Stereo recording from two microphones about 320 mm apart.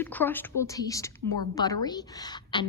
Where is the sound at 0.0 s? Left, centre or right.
Centre.